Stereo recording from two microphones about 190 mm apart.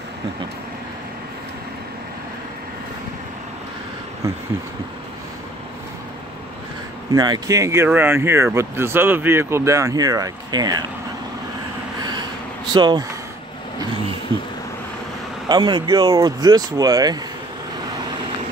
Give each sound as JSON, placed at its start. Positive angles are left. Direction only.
{"t": 7.1, "sound": "speech", "side_deg": -20}
{"t": 12.0, "sound": "a sound", "side_deg": -25}
{"t": 15.4, "sound": "speech", "side_deg": -25}